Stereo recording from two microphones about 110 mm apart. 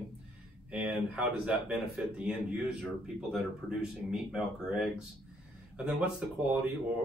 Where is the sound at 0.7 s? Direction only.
10° right (ahead or behind).